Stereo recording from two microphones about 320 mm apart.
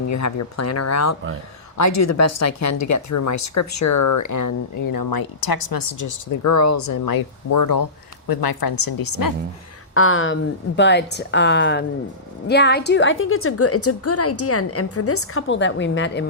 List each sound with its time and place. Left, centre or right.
0.1 s speech: left
8.3 s a woman's voice: left
9.9 s a woman's voice: left